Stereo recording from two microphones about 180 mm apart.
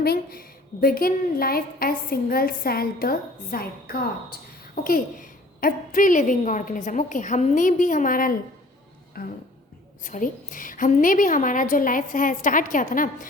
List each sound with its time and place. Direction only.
0.0 s a woman's voice: 60° left (ahead or behind)